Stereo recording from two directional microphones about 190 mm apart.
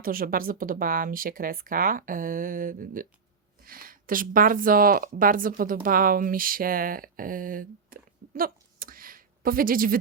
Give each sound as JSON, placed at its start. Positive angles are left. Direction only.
{"t": 0.0, "sound": "speech", "side_deg": -50}